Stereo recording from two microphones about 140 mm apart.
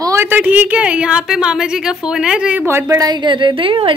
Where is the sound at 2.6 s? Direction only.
20° right (ahead or behind); by 3.9 s 40° right (ahead or behind).